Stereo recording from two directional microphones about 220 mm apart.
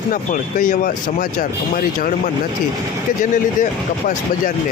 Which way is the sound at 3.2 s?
35° left (ahead or behind).